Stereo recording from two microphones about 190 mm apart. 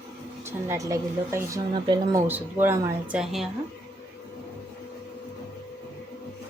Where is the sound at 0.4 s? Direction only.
15° right (ahead or behind).